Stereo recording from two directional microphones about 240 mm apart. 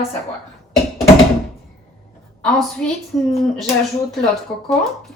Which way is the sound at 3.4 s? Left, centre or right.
Centre.